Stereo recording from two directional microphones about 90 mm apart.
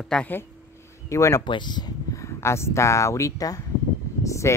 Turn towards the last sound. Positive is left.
turn(degrees=35)  # may be behind; listen again after turning